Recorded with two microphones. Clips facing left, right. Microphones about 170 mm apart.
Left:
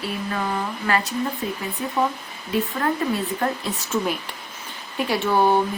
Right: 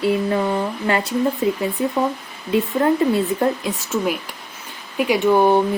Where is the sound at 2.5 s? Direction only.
25° right (ahead or behind).